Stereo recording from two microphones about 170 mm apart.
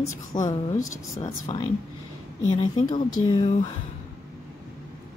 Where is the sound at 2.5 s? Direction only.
45° left (ahead or behind).